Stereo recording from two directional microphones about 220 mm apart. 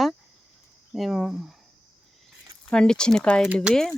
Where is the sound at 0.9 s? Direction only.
Centre (ahead or behind).